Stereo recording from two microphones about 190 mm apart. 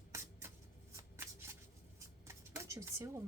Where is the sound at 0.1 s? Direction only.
15° right (ahead or behind).